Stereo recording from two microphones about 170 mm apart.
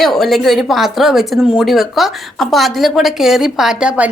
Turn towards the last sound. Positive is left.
turn(degrees=-5)  # may be behind; listen again after turning